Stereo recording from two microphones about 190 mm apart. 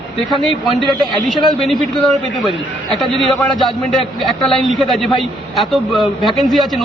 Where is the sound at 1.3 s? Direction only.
Centre (ahead or behind).